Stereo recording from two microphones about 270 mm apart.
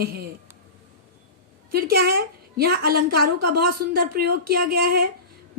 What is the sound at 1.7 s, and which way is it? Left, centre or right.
A woman's voice, right.